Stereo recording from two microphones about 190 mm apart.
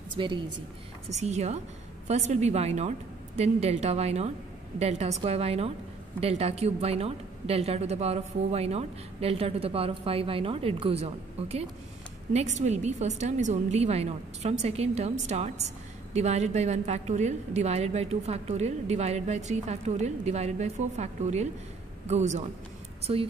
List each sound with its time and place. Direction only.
0.1 s a woman's voice: 25° right (ahead or behind)
1.1 s a woman's voice: 35° right (ahead or behind)